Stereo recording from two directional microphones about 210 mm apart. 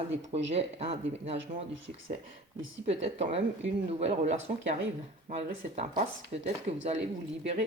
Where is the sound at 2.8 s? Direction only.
30° right (ahead or behind).